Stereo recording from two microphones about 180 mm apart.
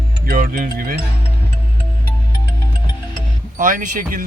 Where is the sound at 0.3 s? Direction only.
55° right (ahead or behind).